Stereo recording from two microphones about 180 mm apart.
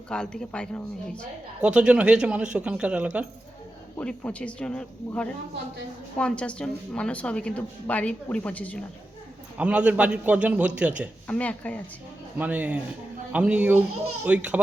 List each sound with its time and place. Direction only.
0.1 s speech: 5° left (ahead or behind)
1.6 s speech: 5° right (ahead or behind)
3.9 s a woman's voice: 10° left (ahead or behind)
9.6 s a man's voice: 5° right (ahead or behind)
11.3 s a woman's voice: 10° left (ahead or behind)
12.4 s a man's voice: 10° right (ahead or behind)